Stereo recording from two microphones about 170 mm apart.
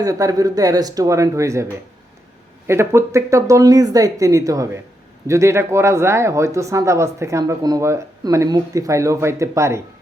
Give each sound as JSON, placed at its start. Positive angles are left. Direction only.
{"t": 0.0, "sound": "speech", "side_deg": -20}
{"t": 2.6, "sound": "speech", "side_deg": -15}